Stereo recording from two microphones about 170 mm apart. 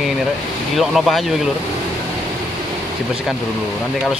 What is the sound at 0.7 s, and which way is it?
Speech, centre (ahead or behind).